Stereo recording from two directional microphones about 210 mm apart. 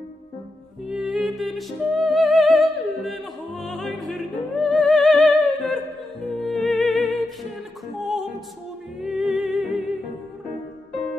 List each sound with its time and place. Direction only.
0.8 s music: centre (ahead or behind)